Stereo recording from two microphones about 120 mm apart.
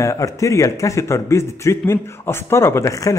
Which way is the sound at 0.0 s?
25° left (ahead or behind).